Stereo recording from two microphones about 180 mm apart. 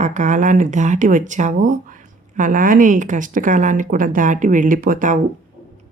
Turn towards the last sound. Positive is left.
turn(degrees=-50)  # may be behind; listen again after turning